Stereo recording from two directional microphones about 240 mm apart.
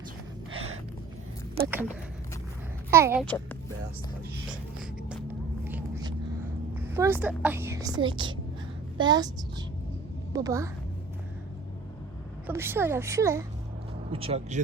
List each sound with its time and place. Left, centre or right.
0.5 s a sound: right
1.6 s speech: right
2.9 s a woman's voice: centre
5.6 s a sound: centre
6.7 s a woman's voice: centre
10.3 s a woman's voice: centre
12.5 s a woman's voice: centre
14.1 s speech: right